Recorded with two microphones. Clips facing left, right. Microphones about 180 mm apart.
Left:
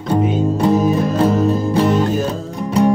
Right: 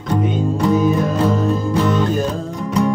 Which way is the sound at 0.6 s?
30° left (ahead or behind).